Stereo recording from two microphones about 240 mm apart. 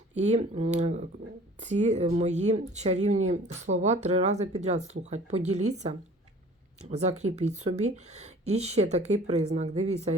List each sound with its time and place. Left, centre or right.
0.1 s speech: right
5.5 s speech: right
6.8 s speech: right